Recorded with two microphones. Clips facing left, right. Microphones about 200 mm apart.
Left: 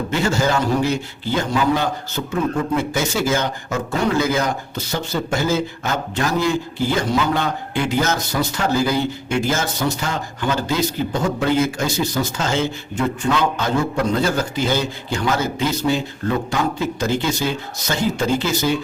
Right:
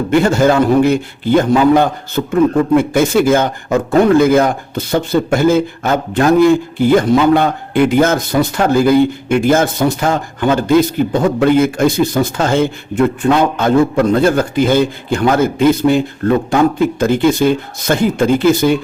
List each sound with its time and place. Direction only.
0.1 s a man's voice: 55° right (ahead or behind)